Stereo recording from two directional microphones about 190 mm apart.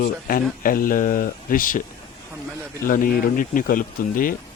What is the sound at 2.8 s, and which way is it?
Speech, 45° left (ahead or behind).